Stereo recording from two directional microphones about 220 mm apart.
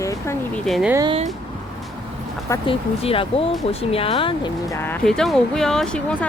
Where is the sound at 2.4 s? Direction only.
20° left (ahead or behind).